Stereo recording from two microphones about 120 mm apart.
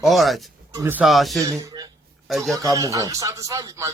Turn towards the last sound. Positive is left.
turn(degrees=-30)  # may be behind; listen again after turning